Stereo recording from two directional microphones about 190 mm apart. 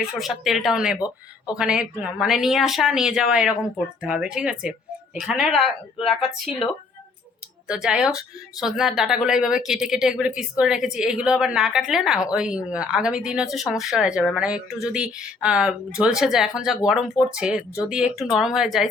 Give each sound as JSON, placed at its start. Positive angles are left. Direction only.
{"t": 0.0, "sound": "a woman's voice", "side_deg": 0}
{"t": 0.9, "sound": "speech", "side_deg": 20}
{"t": 1.5, "sound": "a woman's voice", "side_deg": -5}
{"t": 7.7, "sound": "a woman's voice", "side_deg": -5}